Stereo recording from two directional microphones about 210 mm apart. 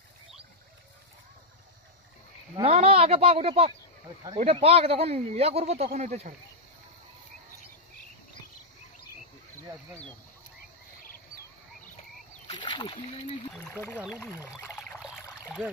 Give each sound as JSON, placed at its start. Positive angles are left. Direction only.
{"t": 2.5, "sound": "speech", "side_deg": -25}
{"t": 12.4, "sound": "speech", "side_deg": 25}
{"t": 14.8, "sound": "a sound", "side_deg": 0}